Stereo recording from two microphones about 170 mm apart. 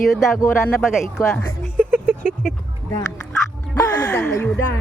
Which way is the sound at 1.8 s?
10° right (ahead or behind).